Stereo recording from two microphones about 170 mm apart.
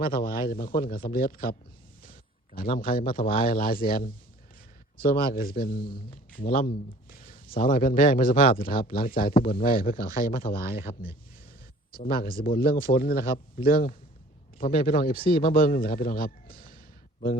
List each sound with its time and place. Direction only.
0.0 s a man's voice: 60° left (ahead or behind)
10.9 s speech: 30° left (ahead or behind)
11.9 s a man's voice: 60° left (ahead or behind)